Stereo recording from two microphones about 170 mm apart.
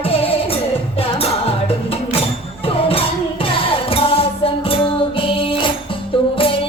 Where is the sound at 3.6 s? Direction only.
35° left (ahead or behind).